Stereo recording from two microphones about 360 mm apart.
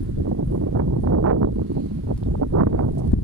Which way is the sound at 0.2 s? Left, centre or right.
Right.